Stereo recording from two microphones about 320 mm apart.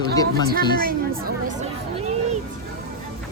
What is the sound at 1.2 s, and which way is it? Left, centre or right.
Speech, right.